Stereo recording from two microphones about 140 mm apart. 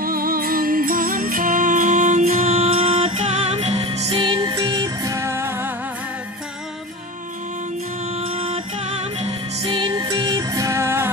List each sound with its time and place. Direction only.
0.0 s music: 90° right; by 5.7 s 20° right (ahead or behind)
8.2 s music: 40° right (ahead or behind); by 11.1 s 20° right (ahead or behind)